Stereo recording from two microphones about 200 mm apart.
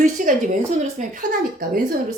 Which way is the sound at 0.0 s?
40° right (ahead or behind).